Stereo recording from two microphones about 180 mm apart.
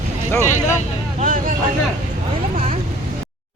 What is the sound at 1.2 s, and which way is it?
Vehicle, 50° right (ahead or behind).